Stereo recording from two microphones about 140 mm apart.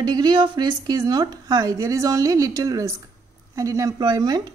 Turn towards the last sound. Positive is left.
turn(degrees=-30)  # may be behind; listen again after turning